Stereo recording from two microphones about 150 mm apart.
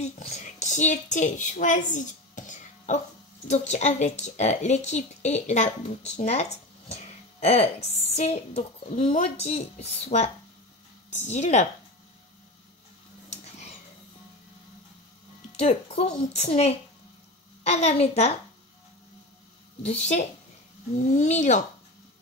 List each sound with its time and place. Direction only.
0.0 s a sound: 50° left (ahead or behind)
3.4 s speech: 50° left (ahead or behind)
15.5 s speech: 45° left (ahead or behind)
19.8 s speech: 45° left (ahead or behind)